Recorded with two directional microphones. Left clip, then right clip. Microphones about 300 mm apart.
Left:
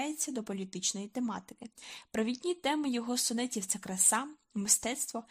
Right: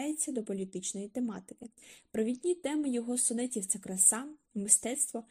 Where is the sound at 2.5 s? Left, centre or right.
Centre.